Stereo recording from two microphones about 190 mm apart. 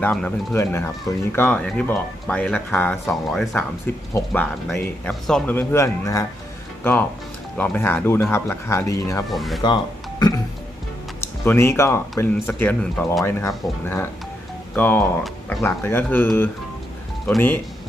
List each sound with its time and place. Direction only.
0.0 s speech: 10° left (ahead or behind)
7.6 s speech: 10° left (ahead or behind)
9.3 s speech: centre (ahead or behind)
9.6 s speech: 20° left (ahead or behind)